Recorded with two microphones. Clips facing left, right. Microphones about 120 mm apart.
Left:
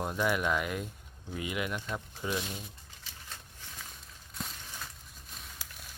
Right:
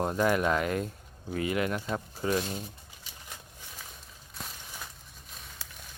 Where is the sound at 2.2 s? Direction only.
40° right (ahead or behind).